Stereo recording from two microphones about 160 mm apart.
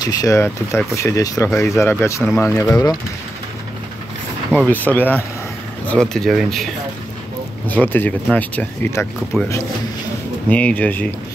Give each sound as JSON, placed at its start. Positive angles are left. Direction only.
{"t": 0.0, "sound": "speech", "side_deg": 25}
{"t": 4.6, "sound": "speech", "side_deg": 10}
{"t": 7.6, "sound": "speech", "side_deg": 10}
{"t": 10.5, "sound": "speech", "side_deg": 10}